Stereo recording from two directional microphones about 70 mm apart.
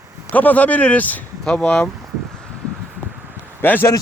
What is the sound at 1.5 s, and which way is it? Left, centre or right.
Speech, centre.